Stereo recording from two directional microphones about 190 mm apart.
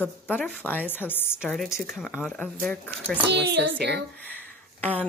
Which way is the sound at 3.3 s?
65° right (ahead or behind).